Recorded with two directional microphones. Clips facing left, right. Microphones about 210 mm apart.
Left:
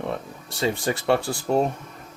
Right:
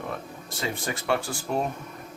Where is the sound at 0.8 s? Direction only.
30° left (ahead or behind).